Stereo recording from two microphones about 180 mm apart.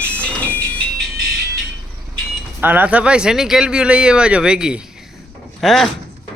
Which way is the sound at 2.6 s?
10° right (ahead or behind).